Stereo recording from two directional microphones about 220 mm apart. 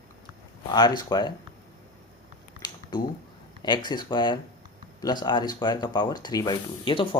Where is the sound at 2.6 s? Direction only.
20° left (ahead or behind).